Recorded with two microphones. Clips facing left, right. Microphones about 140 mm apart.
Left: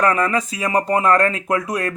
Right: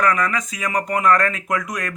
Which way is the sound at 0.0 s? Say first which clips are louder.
Left 2 dB; 30° left (ahead or behind).